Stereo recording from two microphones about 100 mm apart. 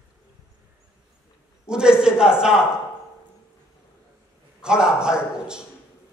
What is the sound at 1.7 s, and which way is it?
A man's voice, 10° right (ahead or behind).